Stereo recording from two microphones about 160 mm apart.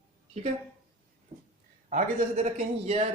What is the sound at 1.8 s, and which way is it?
A man's voice, 50° right (ahead or behind).